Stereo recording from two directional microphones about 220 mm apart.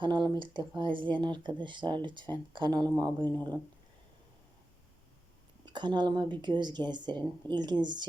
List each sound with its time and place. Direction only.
0.0 s speech: 20° right (ahead or behind)
3.2 s speech: 10° left (ahead or behind)
5.6 s speech: 20° right (ahead or behind)